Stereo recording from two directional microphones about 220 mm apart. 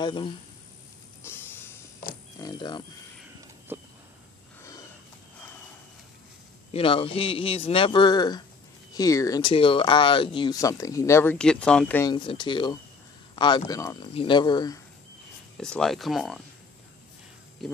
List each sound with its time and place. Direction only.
0.0 s a man's voice: 20° left (ahead or behind)
1.2 s music: 10° left (ahead or behind)
2.3 s a sound: 15° left (ahead or behind)
3.7 s a sound: 10° right (ahead or behind)
6.7 s a man's voice: 25° left (ahead or behind); by 12.1 s 5° left (ahead or behind)
12.1 s a man's voice: 20° left (ahead or behind)
15.6 s speech: centre (ahead or behind)
17.6 s speech: centre (ahead or behind)